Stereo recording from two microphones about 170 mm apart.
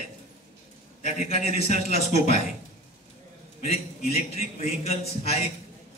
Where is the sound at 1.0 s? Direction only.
40° left (ahead or behind).